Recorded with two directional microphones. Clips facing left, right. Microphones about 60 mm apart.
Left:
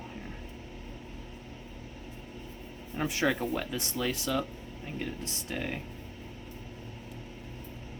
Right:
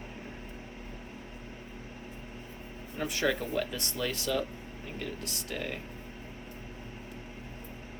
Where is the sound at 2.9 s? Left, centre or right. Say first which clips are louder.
Left 1 dB; centre.